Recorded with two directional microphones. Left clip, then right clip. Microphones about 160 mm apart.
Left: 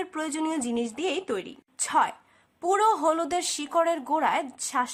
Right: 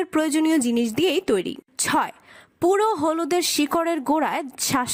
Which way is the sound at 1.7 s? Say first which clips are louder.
Right 1 dB; 35° right (ahead or behind).